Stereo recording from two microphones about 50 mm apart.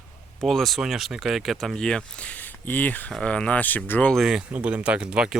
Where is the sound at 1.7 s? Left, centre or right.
Centre.